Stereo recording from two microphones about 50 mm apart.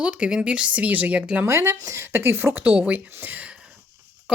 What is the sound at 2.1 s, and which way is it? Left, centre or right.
Speech, right.